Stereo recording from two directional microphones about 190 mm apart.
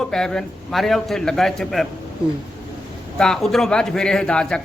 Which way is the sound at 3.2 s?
Centre (ahead or behind).